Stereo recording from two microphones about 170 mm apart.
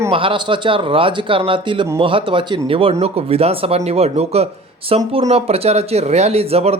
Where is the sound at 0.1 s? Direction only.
30° right (ahead or behind).